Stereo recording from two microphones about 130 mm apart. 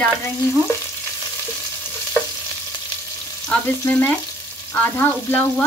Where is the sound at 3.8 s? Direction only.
15° left (ahead or behind).